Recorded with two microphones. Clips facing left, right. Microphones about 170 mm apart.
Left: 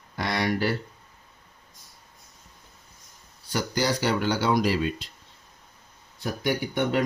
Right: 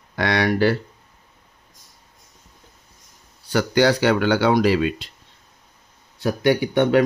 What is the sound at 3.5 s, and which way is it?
Speech, 75° right (ahead or behind).